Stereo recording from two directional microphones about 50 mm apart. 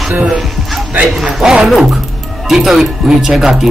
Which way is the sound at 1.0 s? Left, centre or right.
Centre.